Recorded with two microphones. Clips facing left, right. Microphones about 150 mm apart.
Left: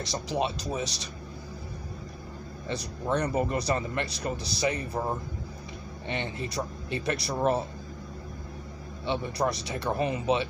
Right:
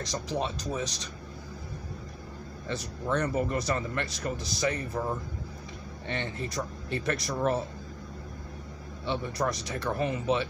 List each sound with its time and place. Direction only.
0.1 s speech: 10° left (ahead or behind)
2.7 s speech: 15° left (ahead or behind)
9.0 s speech: 15° left (ahead or behind)